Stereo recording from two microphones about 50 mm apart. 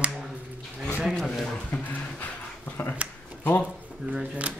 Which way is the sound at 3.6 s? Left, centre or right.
Right.